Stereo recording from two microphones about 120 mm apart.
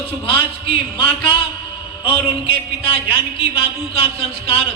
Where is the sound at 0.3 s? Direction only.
45° left (ahead or behind).